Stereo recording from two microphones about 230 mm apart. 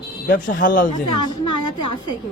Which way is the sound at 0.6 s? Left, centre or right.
Left.